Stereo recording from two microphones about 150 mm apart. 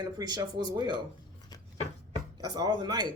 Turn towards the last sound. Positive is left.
turn(degrees=-25)  # may be behind; listen again after turning